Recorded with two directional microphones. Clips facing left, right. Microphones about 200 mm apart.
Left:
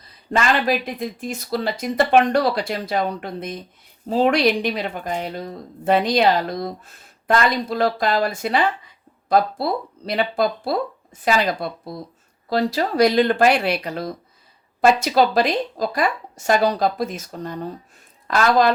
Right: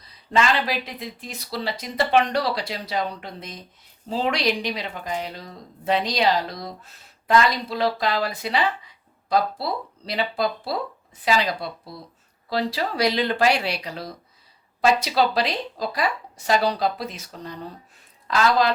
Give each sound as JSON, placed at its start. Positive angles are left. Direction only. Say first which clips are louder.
{"t": 0.3, "sound": "speech", "louder": "left 3 dB", "side_deg": 50}